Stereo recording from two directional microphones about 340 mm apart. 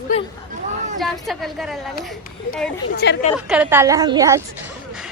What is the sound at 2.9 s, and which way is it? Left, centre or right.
Speech, left.